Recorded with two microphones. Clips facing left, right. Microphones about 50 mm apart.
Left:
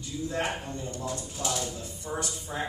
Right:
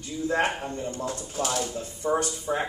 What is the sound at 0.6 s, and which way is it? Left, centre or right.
A man's voice, right.